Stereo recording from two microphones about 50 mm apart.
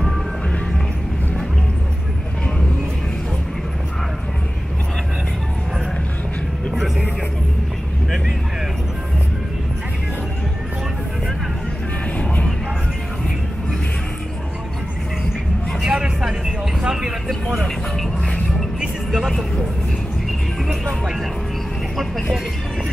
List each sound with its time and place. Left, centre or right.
12.2 s music: left
15.8 s vehicle: centre
17.3 s music: centre
18.8 s music: centre
21.9 s vehicle: centre